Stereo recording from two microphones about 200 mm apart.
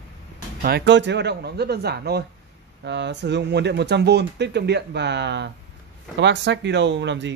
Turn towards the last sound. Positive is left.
turn(degrees=-60)  # may be behind; listen again after turning